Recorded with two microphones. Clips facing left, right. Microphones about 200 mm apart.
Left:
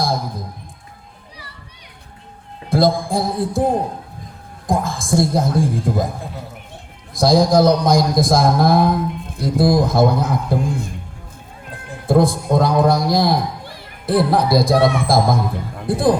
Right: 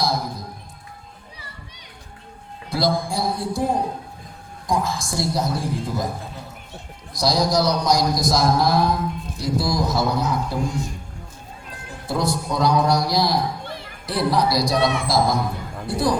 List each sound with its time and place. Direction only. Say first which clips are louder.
2.6 s a man's voice: left 6 dB; 50° left (ahead or behind)
7.1 s a man's voice: left 7 dB; 50° left (ahead or behind)